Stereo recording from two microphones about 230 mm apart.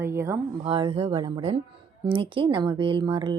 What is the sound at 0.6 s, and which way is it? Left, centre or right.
Speech, right.